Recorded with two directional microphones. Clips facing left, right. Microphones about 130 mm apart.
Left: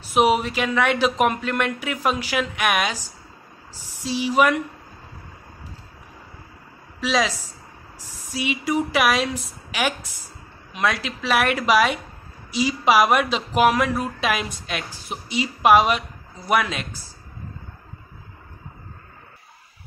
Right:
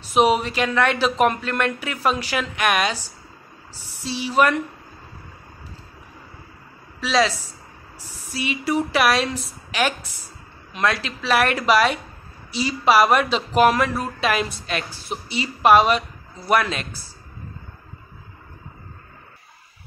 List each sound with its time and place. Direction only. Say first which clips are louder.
0.0 s speech: right 1 dB; 10° left (ahead or behind)
7.0 s speech: right 2 dB; 10° left (ahead or behind)